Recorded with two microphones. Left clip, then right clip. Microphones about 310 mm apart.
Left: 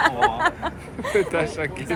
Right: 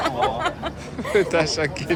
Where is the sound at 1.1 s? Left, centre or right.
Centre.